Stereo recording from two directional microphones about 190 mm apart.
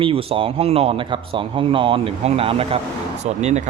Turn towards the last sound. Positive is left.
turn(degrees=-35)  # may be behind; listen again after turning